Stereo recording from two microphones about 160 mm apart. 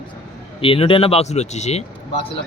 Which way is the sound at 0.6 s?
35° left (ahead or behind).